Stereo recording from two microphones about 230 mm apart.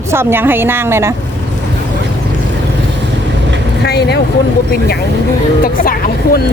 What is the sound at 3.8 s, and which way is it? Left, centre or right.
Vehicle, left.